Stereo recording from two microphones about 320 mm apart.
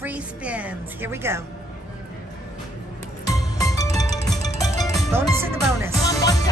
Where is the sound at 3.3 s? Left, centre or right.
Centre.